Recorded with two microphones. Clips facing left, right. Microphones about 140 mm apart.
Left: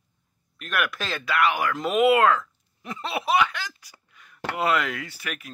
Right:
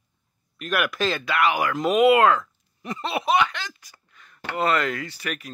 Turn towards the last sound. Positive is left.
turn(degrees=5)  # may be behind; listen again after turning